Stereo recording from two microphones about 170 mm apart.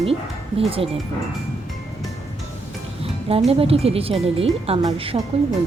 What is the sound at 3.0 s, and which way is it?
Speech, 35° right (ahead or behind).